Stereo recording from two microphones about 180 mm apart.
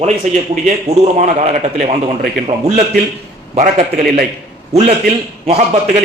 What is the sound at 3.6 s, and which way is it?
Speech, 45° right (ahead or behind).